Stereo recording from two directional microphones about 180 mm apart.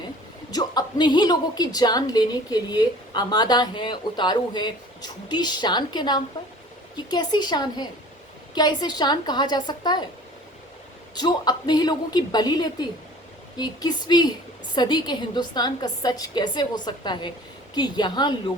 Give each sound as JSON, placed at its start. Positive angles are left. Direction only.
{"t": 0.5, "sound": "a woman's voice", "side_deg": 25}
{"t": 11.1, "sound": "a woman's voice", "side_deg": 25}